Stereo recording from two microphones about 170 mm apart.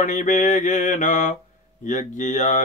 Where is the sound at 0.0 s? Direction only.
45° left (ahead or behind).